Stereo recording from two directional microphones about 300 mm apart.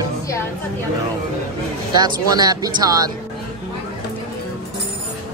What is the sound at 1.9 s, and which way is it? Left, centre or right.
Speech, centre.